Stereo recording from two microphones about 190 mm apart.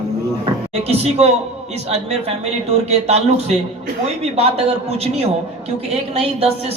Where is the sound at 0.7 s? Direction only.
35° right (ahead or behind).